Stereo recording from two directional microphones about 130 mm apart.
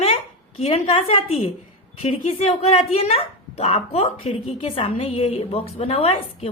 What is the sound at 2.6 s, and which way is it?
A woman's voice, 50° left (ahead or behind).